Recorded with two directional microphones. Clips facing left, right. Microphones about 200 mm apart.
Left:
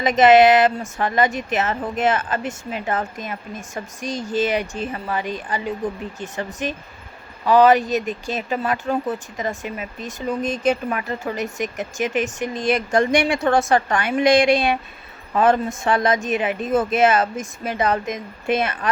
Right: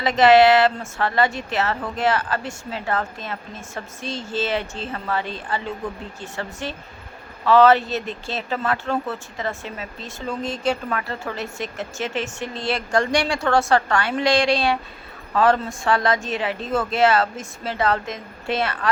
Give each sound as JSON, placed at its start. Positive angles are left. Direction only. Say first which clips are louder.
{"t": 0.0, "sound": "speech", "louder": "left 1 dB", "side_deg": 20}